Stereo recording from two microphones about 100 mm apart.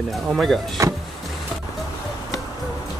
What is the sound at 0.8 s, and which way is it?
Speech, 30° right (ahead or behind).